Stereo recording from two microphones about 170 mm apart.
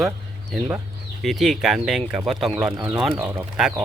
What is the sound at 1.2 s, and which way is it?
Speech, centre (ahead or behind).